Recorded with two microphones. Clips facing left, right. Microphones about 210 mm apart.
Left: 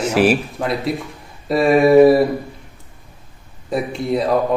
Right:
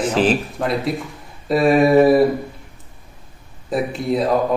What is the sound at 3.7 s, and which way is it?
Speech, centre (ahead or behind).